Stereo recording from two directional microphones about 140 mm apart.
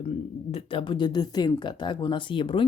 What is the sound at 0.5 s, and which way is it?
Speech, 40° left (ahead or behind).